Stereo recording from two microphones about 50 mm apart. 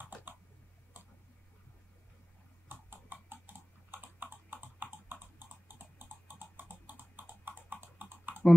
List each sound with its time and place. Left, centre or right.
0.0 s typing: right
2.7 s typing: right
5.7 s a sound: right